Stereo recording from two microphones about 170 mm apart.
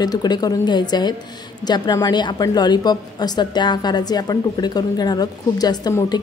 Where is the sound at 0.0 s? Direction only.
25° left (ahead or behind).